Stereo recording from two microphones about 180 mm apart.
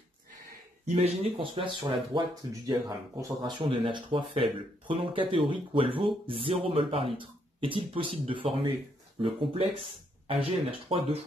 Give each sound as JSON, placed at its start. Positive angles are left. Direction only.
{"t": 0.9, "sound": "speech", "side_deg": -35}
{"t": 10.9, "sound": "speech", "side_deg": -35}